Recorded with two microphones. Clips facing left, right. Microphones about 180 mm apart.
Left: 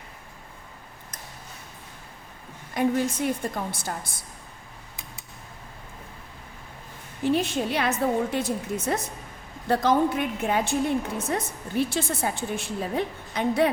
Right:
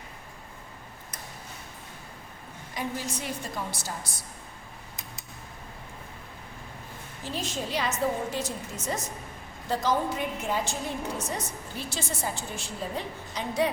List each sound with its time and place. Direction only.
2.7 s a woman's voice: 55° left (ahead or behind)
7.3 s a woman's voice: 60° left (ahead or behind)